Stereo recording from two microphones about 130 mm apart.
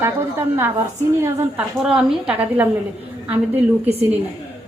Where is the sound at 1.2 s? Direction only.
20° right (ahead or behind).